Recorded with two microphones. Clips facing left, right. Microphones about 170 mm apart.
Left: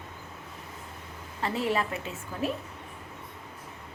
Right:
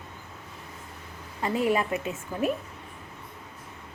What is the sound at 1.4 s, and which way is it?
A woman's voice, 15° right (ahead or behind).